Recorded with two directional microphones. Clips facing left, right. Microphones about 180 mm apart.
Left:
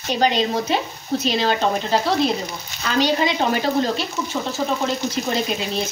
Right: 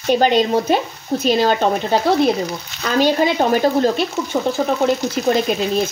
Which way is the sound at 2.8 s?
50° right (ahead or behind).